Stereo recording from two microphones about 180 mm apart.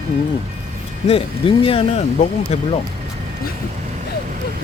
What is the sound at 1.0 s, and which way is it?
Speech, 30° left (ahead or behind).